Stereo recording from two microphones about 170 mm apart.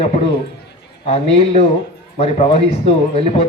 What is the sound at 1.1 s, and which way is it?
A man's voice, 40° left (ahead or behind).